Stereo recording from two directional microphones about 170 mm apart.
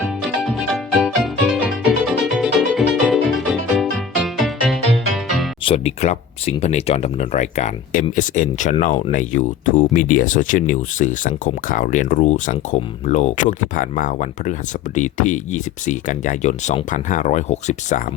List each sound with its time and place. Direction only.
0.0 s music: centre (ahead or behind)
5.6 s speech: 35° left (ahead or behind)